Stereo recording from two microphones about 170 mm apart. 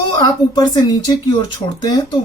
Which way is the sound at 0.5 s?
25° left (ahead or behind).